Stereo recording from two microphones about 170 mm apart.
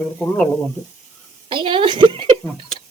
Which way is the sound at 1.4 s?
30° right (ahead or behind).